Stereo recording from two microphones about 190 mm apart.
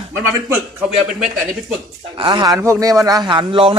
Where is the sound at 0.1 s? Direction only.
10° right (ahead or behind).